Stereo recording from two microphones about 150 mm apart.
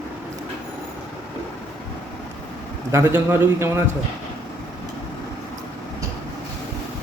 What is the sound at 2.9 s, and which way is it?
Speech, 20° right (ahead or behind).